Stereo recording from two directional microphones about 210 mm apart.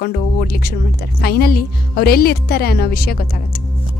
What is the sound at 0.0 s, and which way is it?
Speech, 45° left (ahead or behind).